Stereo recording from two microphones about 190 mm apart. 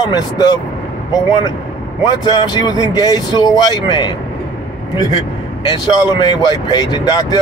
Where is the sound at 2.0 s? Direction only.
25° left (ahead or behind).